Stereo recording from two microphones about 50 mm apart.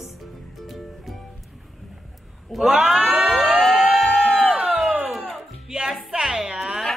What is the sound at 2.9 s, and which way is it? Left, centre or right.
Crowd, right.